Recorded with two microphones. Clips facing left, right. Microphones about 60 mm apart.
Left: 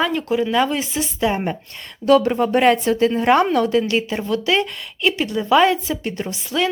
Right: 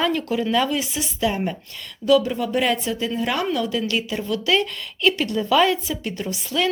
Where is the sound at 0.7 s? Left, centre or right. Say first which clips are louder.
Left 2 dB; left.